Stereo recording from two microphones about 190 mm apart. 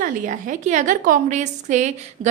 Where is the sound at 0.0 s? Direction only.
40° right (ahead or behind).